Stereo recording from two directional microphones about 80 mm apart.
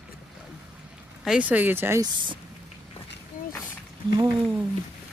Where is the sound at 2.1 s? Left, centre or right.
Right.